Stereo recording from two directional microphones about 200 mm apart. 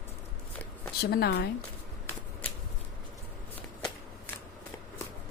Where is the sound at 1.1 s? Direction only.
50° left (ahead or behind).